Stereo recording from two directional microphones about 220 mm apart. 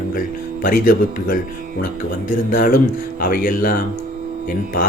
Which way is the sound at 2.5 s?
40° left (ahead or behind).